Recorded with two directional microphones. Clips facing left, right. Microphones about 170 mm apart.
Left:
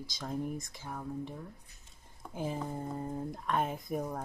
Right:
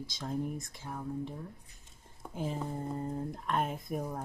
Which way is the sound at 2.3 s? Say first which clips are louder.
Even; 10° left (ahead or behind).